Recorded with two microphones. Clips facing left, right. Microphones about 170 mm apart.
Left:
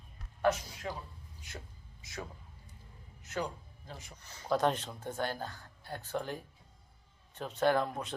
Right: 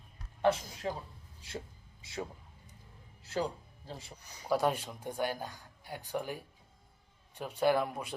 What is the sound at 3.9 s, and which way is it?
Speech, 30° right (ahead or behind).